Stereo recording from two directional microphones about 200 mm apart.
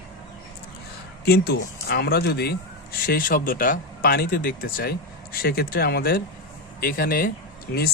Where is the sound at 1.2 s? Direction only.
55° left (ahead or behind).